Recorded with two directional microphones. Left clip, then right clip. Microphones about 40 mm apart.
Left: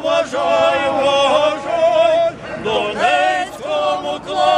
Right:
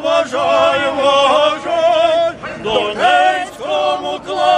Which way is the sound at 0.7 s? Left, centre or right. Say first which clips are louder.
Right 1 dB; right.